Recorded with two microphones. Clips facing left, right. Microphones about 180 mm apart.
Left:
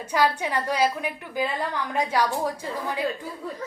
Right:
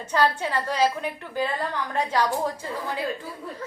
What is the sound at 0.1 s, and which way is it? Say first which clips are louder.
A woman's voice: even; 15° left (ahead or behind).